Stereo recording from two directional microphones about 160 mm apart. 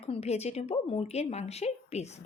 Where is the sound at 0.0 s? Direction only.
40° left (ahead or behind).